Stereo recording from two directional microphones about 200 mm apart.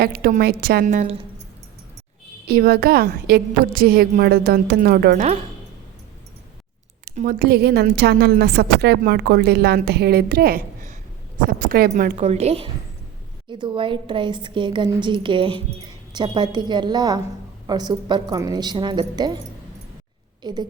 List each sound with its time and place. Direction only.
0.0 s a woman's voice: 50° right (ahead or behind)
2.5 s a woman's voice: 50° right (ahead or behind)
7.0 s a woman's voice: 45° right (ahead or behind); by 19.4 s 20° right (ahead or behind)
20.4 s a woman's voice: 20° right (ahead or behind)